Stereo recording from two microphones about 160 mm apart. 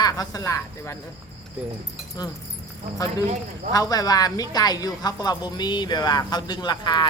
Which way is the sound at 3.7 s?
25° left (ahead or behind).